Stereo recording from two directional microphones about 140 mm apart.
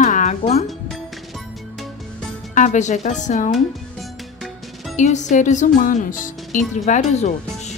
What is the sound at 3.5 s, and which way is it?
Music, centre (ahead or behind).